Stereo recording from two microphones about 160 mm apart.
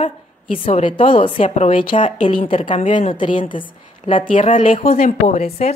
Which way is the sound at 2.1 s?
45° left (ahead or behind).